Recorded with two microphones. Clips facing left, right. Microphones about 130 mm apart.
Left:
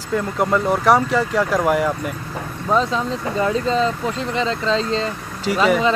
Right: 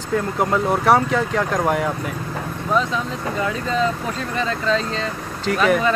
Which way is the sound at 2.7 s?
30° left (ahead or behind).